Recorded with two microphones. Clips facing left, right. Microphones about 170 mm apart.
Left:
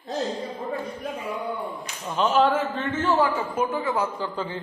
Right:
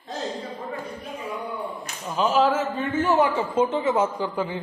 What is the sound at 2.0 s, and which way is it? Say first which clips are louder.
A man's voice: even; 5° right (ahead or behind).